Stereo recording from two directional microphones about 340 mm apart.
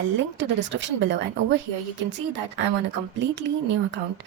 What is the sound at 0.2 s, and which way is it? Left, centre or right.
A woman's voice, right.